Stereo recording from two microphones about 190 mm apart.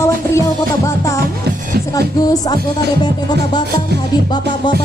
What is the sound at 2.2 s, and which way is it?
Music, 20° left (ahead or behind).